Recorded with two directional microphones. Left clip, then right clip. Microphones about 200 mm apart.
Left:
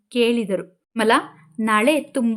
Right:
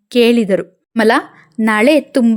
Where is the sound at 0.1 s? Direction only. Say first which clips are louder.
Right 8 dB; 35° right (ahead or behind).